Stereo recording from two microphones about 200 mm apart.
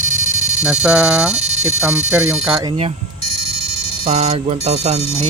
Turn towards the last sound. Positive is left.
turn(degrees=-30)  # may be behind; listen again after turning